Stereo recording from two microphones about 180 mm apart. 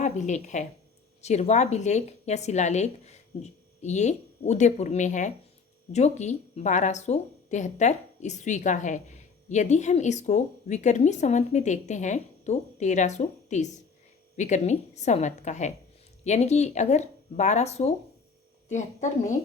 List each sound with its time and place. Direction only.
0.0 s a woman's voice: 40° left (ahead or behind)